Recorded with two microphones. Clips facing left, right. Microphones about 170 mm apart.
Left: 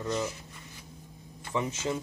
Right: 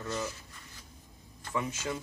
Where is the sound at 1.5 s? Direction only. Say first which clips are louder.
Left 3 dB; 25° left (ahead or behind).